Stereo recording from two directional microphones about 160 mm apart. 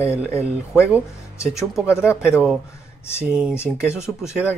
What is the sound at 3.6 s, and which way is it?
Speech, 15° left (ahead or behind).